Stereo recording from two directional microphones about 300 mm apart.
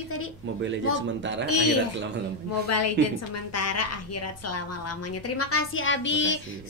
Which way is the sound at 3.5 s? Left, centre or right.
Left.